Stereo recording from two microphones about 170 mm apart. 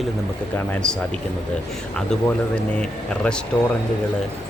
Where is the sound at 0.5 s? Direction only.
5° left (ahead or behind).